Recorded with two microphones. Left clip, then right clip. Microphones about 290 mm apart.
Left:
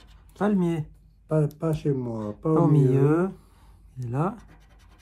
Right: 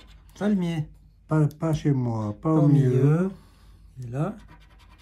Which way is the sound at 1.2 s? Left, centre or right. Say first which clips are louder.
Left 1 dB; right.